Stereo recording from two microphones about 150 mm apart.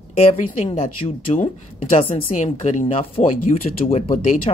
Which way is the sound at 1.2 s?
60° left (ahead or behind).